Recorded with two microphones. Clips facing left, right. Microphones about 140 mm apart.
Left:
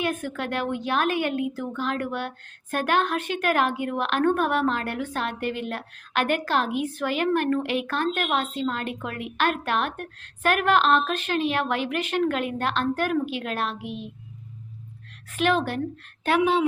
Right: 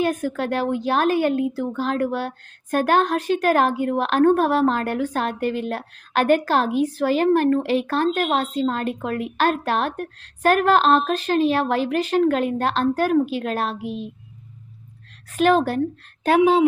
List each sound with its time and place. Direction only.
0.0 s a woman's voice: 40° right (ahead or behind)
15.3 s a woman's voice: 40° right (ahead or behind)